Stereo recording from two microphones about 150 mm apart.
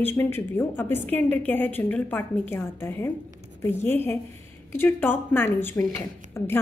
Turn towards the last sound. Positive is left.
turn(degrees=15)  # may be behind; listen again after turning